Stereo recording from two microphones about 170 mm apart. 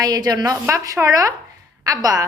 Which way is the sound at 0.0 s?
20° right (ahead or behind).